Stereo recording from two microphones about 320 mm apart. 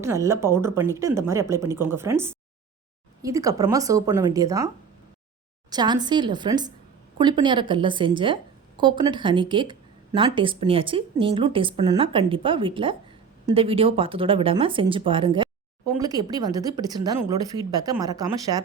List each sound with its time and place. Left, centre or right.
0.0 s speech: centre
5.7 s speech: centre